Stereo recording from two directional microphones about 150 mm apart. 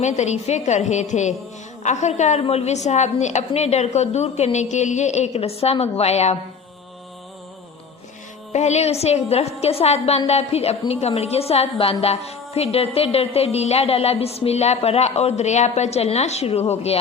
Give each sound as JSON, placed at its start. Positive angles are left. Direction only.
{"t": 0.0, "sound": "a woman's voice", "side_deg": 50}
{"t": 8.5, "sound": "a woman's voice", "side_deg": 50}